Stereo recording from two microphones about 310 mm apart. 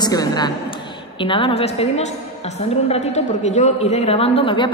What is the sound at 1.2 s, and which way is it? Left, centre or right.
Speech, centre.